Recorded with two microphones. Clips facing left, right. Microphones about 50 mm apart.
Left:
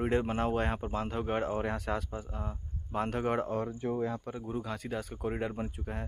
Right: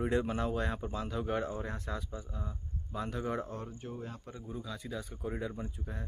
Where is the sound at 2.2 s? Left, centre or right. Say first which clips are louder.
Left 4 dB; left.